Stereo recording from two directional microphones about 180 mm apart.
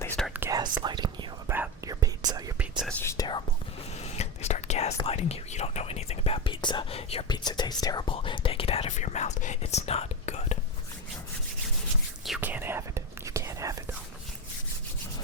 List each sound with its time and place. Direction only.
0.0 s whispering: 10° left (ahead or behind)
0.3 s whispering: 15° right (ahead or behind)
0.8 s whispering: 25° right (ahead or behind)
1.5 s whispering: 10° right (ahead or behind)
1.9 s whispering: 20° right (ahead or behind)
2.6 s whispering: 5° right (ahead or behind)
3.0 s whispering: 20° left (ahead or behind)
4.0 s whispering: 35° left (ahead or behind)
5.0 s speech: 35° left (ahead or behind)
12.2 s whispering: 5° right (ahead or behind)